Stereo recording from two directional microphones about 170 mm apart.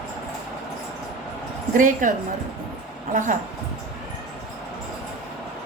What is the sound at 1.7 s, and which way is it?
A woman's voice, 50° right (ahead or behind).